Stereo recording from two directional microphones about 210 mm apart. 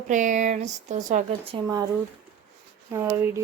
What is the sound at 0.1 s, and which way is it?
Speech, 35° right (ahead or behind).